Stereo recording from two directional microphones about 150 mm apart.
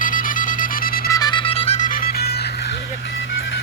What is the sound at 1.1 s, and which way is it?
Music, 30° left (ahead or behind).